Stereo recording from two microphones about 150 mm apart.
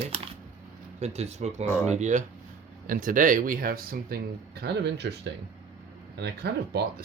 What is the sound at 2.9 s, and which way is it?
Speech, 65° right (ahead or behind).